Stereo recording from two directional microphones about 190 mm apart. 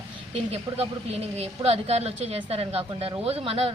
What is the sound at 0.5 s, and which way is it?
Speech, 35° right (ahead or behind).